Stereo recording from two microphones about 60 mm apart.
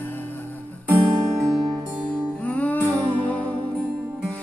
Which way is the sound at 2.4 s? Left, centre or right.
Left.